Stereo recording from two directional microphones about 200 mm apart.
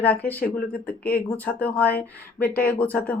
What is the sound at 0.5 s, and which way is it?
Speech, 50° left (ahead or behind).